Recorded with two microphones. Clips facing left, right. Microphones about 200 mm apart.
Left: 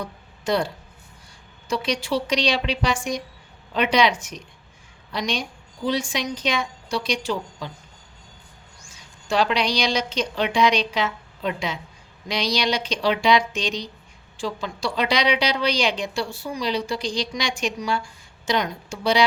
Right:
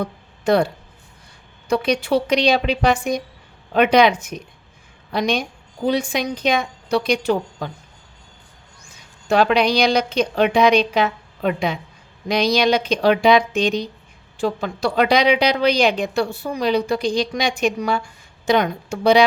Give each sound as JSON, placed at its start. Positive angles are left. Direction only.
{"t": 0.0, "sound": "a sound", "side_deg": -60}
{"t": 1.7, "sound": "a woman's voice", "side_deg": -60}
{"t": 9.2, "sound": "a woman's voice", "side_deg": -55}